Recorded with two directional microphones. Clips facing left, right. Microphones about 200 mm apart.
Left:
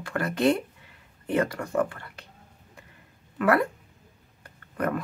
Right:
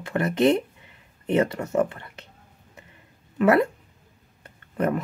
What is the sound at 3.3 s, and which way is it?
Speech, 25° right (ahead or behind).